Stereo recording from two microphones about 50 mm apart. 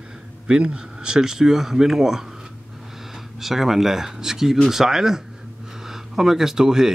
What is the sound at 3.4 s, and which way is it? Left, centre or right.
Speech, centre.